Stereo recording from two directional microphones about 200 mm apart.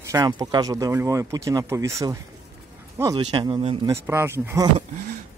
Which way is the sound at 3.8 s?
10° right (ahead or behind).